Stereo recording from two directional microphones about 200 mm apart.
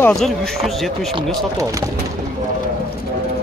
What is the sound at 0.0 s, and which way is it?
A man's voice, centre (ahead or behind).